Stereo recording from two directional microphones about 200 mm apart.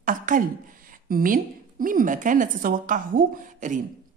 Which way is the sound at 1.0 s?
45° right (ahead or behind).